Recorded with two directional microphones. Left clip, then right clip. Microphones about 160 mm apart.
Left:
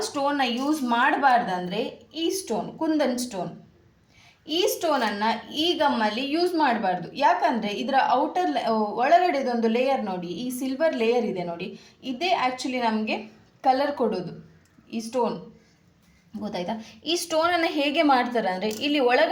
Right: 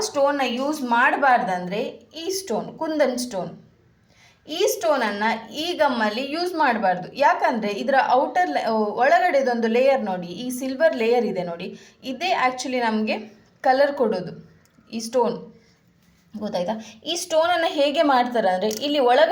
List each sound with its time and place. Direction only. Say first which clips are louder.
0.0 s a woman's voice: right 4 dB; 25° right (ahead or behind)
16.4 s a woman's voice: right 5 dB; 25° right (ahead or behind)